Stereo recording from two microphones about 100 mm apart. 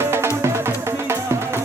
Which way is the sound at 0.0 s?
25° right (ahead or behind).